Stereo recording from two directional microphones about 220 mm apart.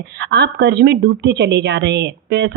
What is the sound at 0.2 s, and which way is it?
A woman's voice, 50° right (ahead or behind).